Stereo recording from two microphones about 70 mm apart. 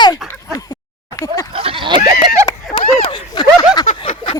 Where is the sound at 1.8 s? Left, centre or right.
Right.